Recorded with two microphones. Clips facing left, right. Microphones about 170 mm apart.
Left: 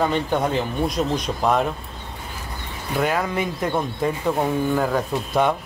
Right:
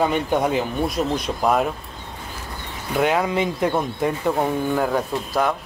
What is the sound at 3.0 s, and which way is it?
Speech, 15° right (ahead or behind).